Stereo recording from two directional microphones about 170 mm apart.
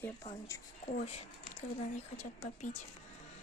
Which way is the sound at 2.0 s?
40° left (ahead or behind).